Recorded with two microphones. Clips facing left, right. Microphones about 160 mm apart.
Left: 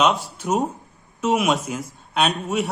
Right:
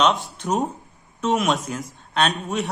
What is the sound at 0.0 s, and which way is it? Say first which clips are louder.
A man's voice: even; 5° left (ahead or behind).